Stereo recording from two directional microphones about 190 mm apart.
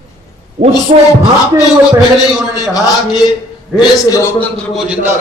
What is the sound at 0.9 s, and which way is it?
Speech, 35° right (ahead or behind).